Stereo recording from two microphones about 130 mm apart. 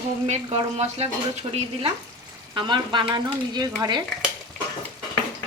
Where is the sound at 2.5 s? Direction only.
35° right (ahead or behind).